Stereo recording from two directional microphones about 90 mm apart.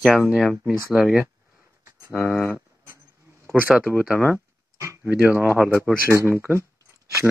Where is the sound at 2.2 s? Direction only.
20° left (ahead or behind).